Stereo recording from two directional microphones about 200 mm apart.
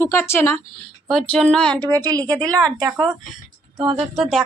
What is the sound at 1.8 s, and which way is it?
A woman's voice, 15° right (ahead or behind).